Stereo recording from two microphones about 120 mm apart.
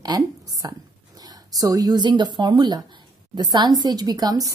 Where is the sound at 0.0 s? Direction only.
30° right (ahead or behind).